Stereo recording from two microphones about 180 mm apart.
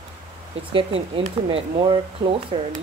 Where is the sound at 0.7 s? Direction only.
30° right (ahead or behind).